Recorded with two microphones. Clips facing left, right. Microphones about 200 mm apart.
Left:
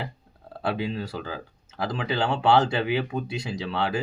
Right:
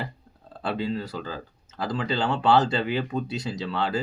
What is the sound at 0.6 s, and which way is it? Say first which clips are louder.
Speech: even; 15° left (ahead or behind).